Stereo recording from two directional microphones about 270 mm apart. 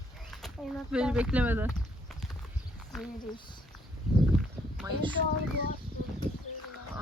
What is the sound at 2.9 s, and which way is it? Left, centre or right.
Speech, centre.